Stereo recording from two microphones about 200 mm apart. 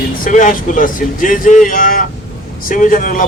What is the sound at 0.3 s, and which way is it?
Speech, 40° left (ahead or behind).